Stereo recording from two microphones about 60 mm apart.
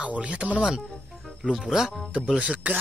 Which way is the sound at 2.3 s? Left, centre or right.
Right.